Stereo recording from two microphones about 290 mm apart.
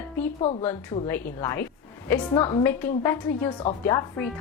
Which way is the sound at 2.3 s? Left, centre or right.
Centre.